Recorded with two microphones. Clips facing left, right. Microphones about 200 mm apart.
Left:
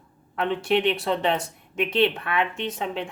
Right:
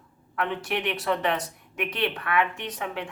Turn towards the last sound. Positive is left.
turn(degrees=25)  # may be behind; listen again after turning